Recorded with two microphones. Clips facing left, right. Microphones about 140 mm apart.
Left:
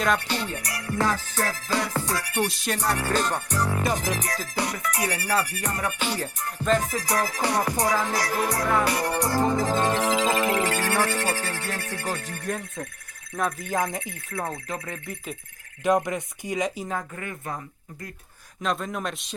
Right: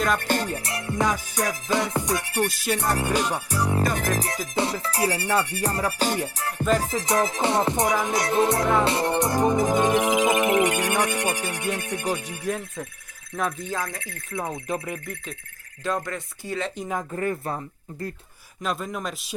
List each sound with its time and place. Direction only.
0.2 s music: 45° right (ahead or behind)
0.5 s music: 25° right (ahead or behind)
2.5 s speech: 5° right (ahead or behind)
3.0 s music: 10° right (ahead or behind)
3.9 s music: 55° right (ahead or behind)
4.4 s music: 25° right (ahead or behind)
6.2 s music: 85° right
6.7 s music: 25° right (ahead or behind); by 12.9 s 5° right (ahead or behind)
13.3 s speech: 5° left (ahead or behind)
13.7 s speech: 20° left (ahead or behind)
14.3 s music: 20° right (ahead or behind)
15.8 s speech: 20° left (ahead or behind)
17.2 s speech: 35° right (ahead or behind)
18.6 s speech: 5° right (ahead or behind)